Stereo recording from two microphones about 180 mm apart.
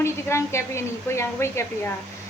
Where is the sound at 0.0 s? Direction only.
15° left (ahead or behind).